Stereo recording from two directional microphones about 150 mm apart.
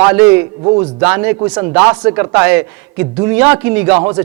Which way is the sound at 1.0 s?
15° right (ahead or behind).